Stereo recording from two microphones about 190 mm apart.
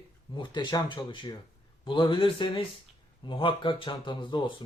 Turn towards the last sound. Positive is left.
turn(degrees=25)  # may be behind; listen again after turning